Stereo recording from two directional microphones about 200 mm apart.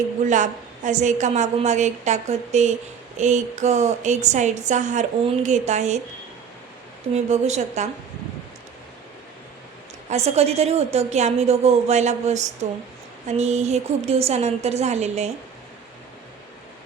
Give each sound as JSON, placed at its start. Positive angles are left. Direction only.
{"t": 0.3, "sound": "a woman's voice", "side_deg": -40}
{"t": 7.1, "sound": "a woman's voice", "side_deg": -35}
{"t": 10.1, "sound": "a woman's voice", "side_deg": -30}